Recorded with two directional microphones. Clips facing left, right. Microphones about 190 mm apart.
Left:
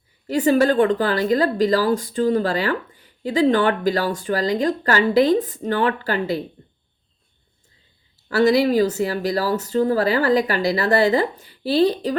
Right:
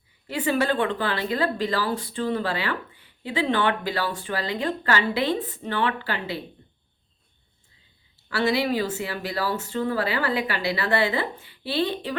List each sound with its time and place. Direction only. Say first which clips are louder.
0.3 s speech: left 7 dB; 40° left (ahead or behind)
8.3 s speech: left 7 dB; 40° left (ahead or behind)